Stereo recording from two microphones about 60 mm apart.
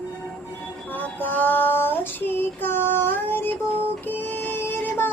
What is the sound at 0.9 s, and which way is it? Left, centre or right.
Female singing, left.